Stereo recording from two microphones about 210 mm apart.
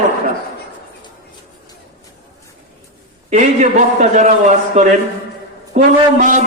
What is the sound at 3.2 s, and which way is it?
Speech, 35° right (ahead or behind).